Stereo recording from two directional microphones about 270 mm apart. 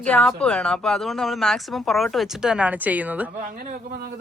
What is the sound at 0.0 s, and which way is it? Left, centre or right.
Speech, centre.